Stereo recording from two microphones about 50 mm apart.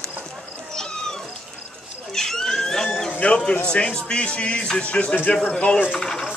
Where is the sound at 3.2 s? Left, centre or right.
Left.